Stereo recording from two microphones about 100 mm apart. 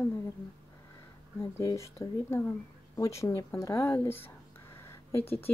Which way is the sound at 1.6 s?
30° left (ahead or behind).